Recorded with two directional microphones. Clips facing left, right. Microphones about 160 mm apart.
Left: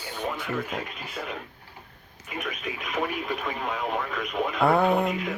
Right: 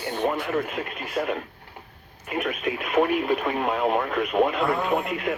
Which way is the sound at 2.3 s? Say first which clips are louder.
Right 7 dB; 60° right (ahead or behind).